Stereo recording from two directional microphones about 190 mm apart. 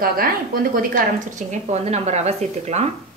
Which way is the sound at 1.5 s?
35° right (ahead or behind).